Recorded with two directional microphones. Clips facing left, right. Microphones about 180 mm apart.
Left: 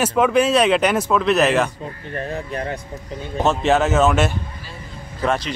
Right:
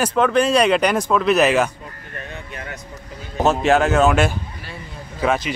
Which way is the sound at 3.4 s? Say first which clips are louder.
Right 1 dB; centre (ahead or behind).